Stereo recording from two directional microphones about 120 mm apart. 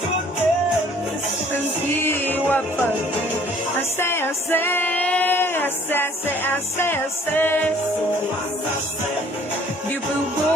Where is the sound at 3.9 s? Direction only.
20° left (ahead or behind).